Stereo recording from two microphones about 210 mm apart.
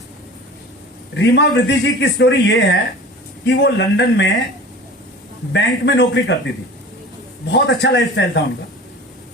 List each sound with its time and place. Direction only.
1.2 s speech: 55° left (ahead or behind)
5.5 s speech: 55° left (ahead or behind)
7.5 s speech: 60° left (ahead or behind)